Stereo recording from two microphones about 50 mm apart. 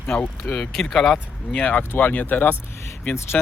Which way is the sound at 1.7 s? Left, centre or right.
Left.